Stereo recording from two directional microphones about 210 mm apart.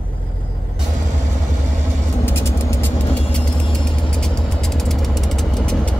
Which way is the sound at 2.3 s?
10° left (ahead or behind).